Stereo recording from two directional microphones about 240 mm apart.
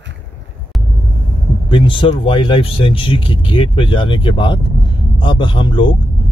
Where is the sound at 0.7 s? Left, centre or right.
Centre.